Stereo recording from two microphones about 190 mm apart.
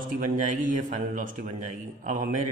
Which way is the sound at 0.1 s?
45° right (ahead or behind).